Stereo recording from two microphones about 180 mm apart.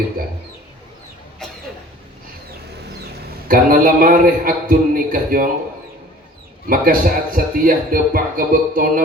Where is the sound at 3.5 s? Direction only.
50° right (ahead or behind).